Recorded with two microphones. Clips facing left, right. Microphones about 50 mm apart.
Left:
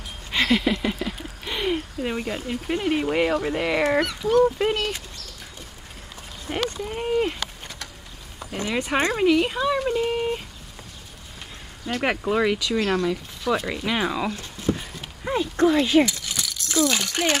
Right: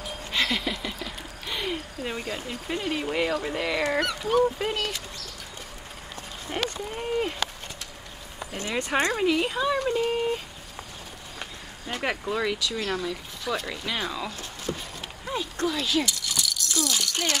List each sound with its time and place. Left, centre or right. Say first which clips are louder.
0.0 s a sound: left 2 dB; centre
3.0 s speech: left 5 dB; centre
4.2 s speech: left 4 dB; centre
4.6 s speech: left 5 dB; left
6.5 s speech: left 3 dB; centre
9.1 s speech: left 4 dB; centre
12.0 s speech: left 5 dB; left
13.0 s speech: left 6 dB; centre
13.7 s speech: left 6 dB; centre
14.7 s clip-clop: left 8 dB; left
15.2 s speech: left 8 dB; left